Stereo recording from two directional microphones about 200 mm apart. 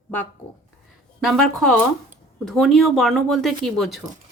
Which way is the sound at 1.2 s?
Centre (ahead or behind).